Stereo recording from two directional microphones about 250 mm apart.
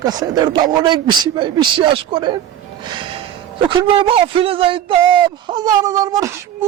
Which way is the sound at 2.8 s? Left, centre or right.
Centre.